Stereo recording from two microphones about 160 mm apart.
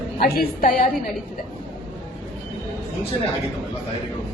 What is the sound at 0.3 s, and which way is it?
Speech, 60° left (ahead or behind).